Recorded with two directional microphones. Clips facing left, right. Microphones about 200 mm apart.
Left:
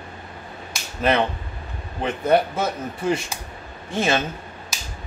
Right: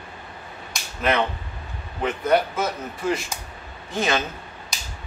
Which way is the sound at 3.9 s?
30° left (ahead or behind).